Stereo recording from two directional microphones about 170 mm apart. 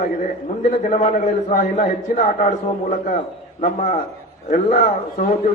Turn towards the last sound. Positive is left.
turn(degrees=50)  # may be behind; listen again after turning